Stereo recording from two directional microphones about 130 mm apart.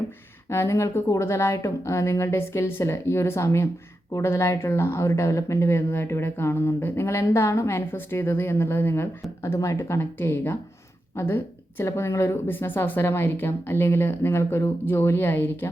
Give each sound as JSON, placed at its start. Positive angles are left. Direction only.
{"t": 0.4, "sound": "speech", "side_deg": 20}